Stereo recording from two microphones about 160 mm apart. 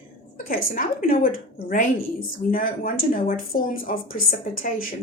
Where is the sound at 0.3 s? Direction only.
60° left (ahead or behind).